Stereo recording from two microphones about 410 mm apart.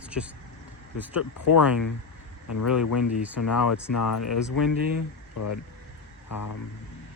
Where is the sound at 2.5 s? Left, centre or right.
Left.